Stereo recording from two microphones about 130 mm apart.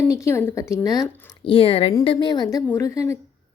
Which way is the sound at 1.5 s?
45° left (ahead or behind).